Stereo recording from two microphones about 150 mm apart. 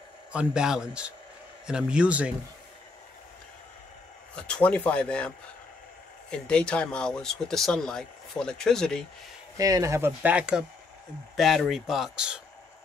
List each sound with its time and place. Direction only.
0.3 s speech: 5° right (ahead or behind)
4.4 s speech: 5° left (ahead or behind)
6.3 s speech: 5° left (ahead or behind)
9.6 s speech: 20° right (ahead or behind); by 12.4 s 5° right (ahead or behind)